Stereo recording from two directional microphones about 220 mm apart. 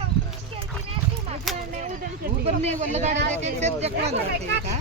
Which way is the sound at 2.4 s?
30° right (ahead or behind).